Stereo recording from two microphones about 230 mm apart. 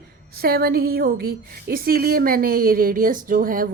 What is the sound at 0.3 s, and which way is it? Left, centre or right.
A woman's voice, right.